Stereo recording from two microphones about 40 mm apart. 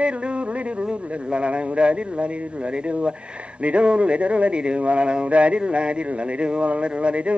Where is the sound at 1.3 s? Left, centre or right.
Right.